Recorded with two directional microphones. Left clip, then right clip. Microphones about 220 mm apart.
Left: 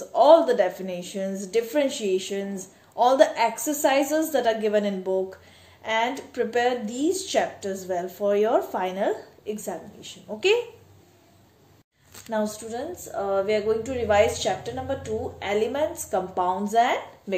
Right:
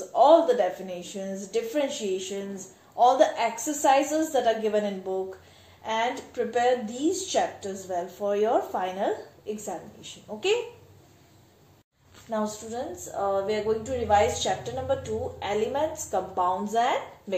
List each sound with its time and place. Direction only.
0.1 s speech: 40° left (ahead or behind)
12.3 s speech: 50° left (ahead or behind)